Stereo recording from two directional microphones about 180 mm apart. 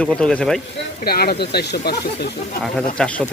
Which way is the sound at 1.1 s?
60° left (ahead or behind).